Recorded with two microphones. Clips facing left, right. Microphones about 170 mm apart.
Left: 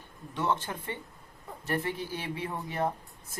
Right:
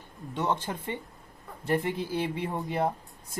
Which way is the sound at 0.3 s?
20° right (ahead or behind).